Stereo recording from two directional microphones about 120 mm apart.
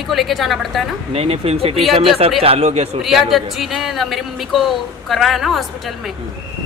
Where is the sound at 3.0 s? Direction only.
Centre (ahead or behind).